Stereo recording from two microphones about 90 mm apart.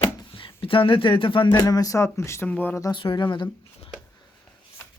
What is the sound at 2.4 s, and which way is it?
Speech, 15° left (ahead or behind).